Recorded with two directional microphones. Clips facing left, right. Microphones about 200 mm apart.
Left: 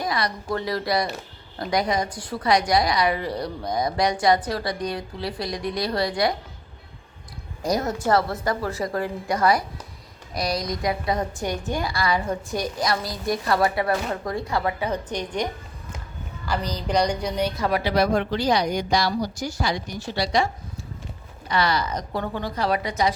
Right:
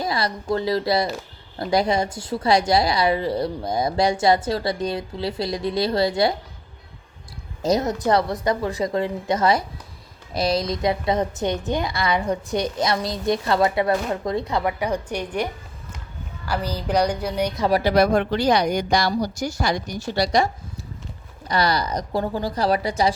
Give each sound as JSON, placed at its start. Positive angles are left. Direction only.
{"t": 0.0, "sound": "speech", "side_deg": -25}
{"t": 7.6, "sound": "speech", "side_deg": -20}
{"t": 16.5, "sound": "a woman's voice", "side_deg": -10}
{"t": 17.7, "sound": "a woman's voice", "side_deg": -35}
{"t": 17.9, "sound": "a woman's voice", "side_deg": -60}